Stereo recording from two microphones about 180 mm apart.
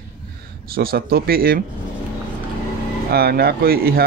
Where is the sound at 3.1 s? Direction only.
60° right (ahead or behind).